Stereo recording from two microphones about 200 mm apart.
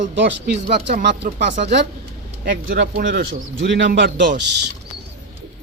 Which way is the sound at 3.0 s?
45° right (ahead or behind).